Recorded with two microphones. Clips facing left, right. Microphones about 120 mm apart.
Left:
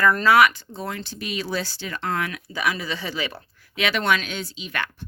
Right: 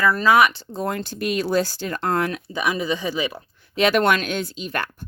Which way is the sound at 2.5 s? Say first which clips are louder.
Right 3 dB; 20° right (ahead or behind).